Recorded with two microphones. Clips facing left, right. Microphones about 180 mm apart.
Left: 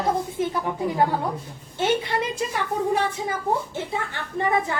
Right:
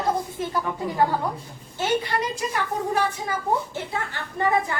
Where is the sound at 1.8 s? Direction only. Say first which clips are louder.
Left 1 dB; 25° left (ahead or behind).